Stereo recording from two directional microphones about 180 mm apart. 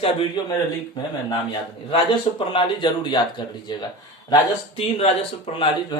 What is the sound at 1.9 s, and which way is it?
Speech, 30° left (ahead or behind).